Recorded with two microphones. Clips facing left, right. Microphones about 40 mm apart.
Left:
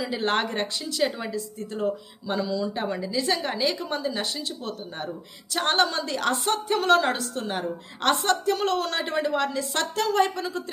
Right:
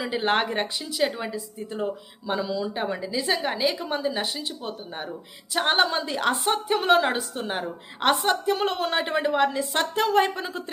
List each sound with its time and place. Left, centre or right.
0.0 s a woman's voice: centre